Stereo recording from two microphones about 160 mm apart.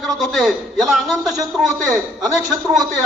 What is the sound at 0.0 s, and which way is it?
A man's voice, centre (ahead or behind).